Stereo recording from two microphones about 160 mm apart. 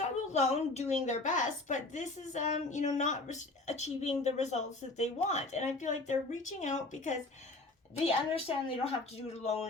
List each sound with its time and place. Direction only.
0.3 s a woman's voice: 45° left (ahead or behind)
8.0 s speech: 40° left (ahead or behind)